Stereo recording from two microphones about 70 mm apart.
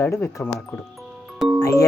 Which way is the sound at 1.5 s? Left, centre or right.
Left.